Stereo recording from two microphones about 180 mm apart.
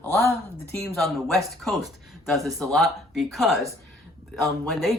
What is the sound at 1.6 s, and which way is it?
Speech, centre (ahead or behind).